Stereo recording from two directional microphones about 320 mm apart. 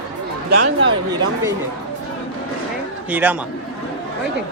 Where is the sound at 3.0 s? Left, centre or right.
Centre.